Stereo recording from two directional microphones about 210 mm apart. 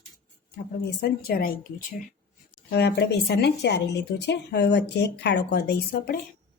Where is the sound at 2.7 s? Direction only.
50° left (ahead or behind).